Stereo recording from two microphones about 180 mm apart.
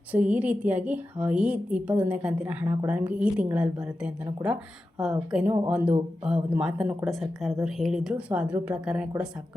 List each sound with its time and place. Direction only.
0.1 s a woman's voice: 10° right (ahead or behind)